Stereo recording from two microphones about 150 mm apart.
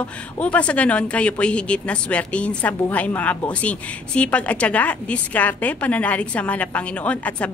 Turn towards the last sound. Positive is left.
turn(degrees=10)  # may be behind; listen again after turning